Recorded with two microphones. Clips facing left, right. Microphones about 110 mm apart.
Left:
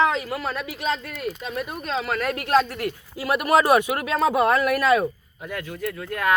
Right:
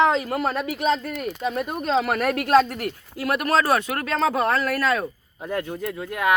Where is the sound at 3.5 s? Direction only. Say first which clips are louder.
Left 4 dB; 15° left (ahead or behind).